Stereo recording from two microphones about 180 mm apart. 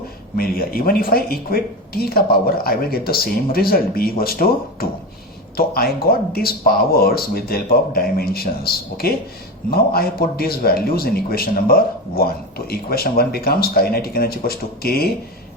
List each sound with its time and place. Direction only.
0.3 s speech: 55° left (ahead or behind)